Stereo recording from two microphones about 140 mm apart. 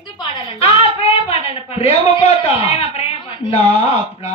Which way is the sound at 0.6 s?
50° left (ahead or behind).